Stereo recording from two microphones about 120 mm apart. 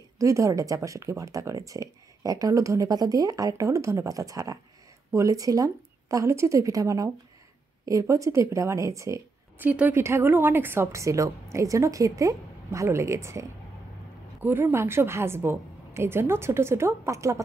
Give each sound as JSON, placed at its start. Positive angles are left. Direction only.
{"t": 0.2, "sound": "speech", "side_deg": -25}
{"t": 9.7, "sound": "speech", "side_deg": -15}